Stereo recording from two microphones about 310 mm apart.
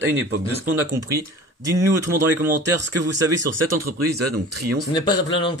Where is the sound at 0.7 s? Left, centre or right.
Right.